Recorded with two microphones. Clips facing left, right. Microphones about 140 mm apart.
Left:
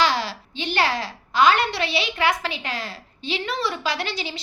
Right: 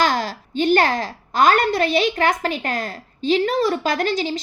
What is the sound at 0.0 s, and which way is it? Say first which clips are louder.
A woman's voice: right 2 dB; 45° right (ahead or behind).